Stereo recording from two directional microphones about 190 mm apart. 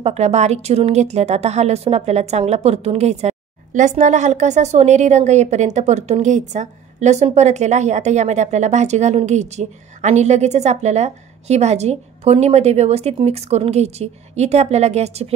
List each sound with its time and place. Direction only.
0.0 s a woman's voice: 35° right (ahead or behind)